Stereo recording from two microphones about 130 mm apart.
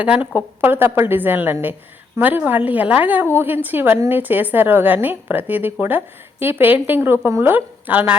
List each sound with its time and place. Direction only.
0.0 s a woman's voice: 10° right (ahead or behind)